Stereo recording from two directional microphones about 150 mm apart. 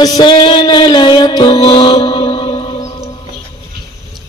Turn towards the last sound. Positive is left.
turn(degrees=35)  # may be behind; listen again after turning